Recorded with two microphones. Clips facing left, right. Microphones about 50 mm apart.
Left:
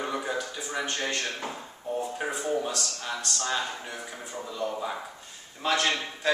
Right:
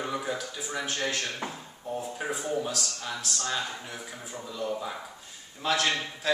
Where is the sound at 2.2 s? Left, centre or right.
Centre.